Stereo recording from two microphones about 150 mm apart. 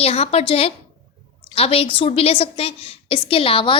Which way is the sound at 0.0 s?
40° left (ahead or behind).